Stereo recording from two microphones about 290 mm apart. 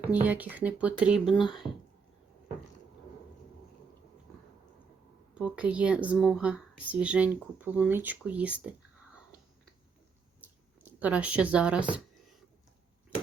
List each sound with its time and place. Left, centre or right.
0.0 s a woman's voice: centre
1.5 s speech: centre
5.3 s a woman's voice: centre
10.4 s a sound: centre